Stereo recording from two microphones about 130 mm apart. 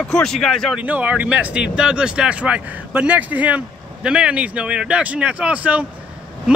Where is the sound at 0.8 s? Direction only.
10° right (ahead or behind).